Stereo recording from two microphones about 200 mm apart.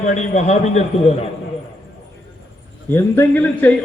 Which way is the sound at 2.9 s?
10° left (ahead or behind).